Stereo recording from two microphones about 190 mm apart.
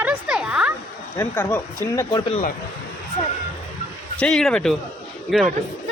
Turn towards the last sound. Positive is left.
turn(degrees=0)  # may be behind; listen again after turning